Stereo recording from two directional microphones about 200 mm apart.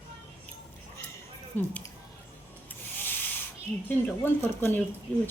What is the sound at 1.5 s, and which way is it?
Speech, 10° left (ahead or behind).